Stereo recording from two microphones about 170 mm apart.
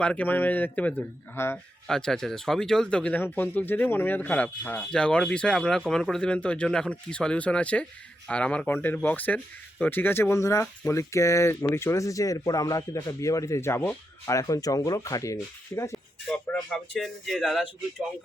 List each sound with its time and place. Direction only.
0.0 s speech: 10° left (ahead or behind)
16.2 s speech: 5° left (ahead or behind)